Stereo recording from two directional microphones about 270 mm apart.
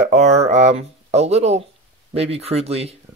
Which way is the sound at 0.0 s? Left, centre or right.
Right.